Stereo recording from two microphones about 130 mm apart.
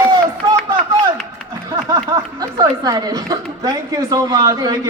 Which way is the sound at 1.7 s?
30° right (ahead or behind).